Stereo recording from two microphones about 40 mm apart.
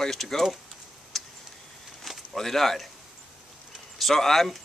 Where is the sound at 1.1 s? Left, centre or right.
Centre.